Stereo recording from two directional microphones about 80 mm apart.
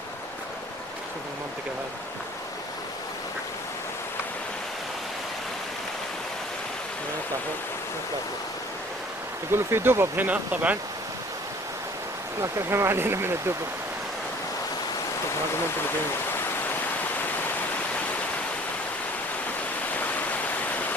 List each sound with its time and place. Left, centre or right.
9.5 s speech: right
12.4 s speech: right
19.9 s waterfall: left